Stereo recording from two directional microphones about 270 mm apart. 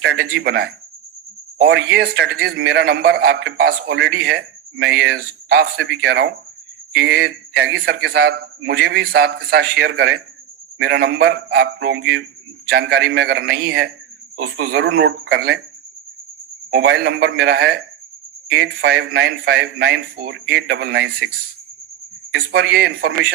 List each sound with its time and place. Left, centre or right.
0.0 s speech: right
16.7 s speech: right
22.4 s speech: right